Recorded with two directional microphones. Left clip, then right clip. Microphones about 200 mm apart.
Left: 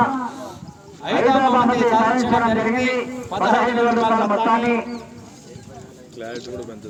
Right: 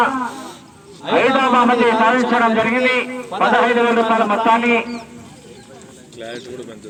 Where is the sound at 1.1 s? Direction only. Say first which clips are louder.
Right 2 dB; 20° right (ahead or behind).